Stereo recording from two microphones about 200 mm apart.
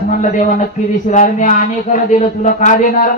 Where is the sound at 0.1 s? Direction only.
40° left (ahead or behind).